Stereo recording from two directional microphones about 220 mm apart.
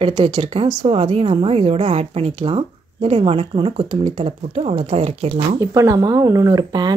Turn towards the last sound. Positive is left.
turn(degrees=-20)  # may be behind; listen again after turning